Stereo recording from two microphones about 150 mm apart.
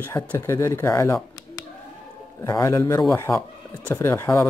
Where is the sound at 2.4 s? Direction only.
25° left (ahead or behind).